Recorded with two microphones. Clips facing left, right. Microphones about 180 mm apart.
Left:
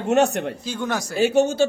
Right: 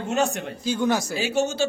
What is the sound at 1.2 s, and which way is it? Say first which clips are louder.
Speech: left 6 dB; 55° left (ahead or behind).